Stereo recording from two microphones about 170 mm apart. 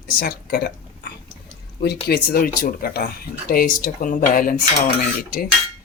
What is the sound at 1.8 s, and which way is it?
Speech, 70° left (ahead or behind).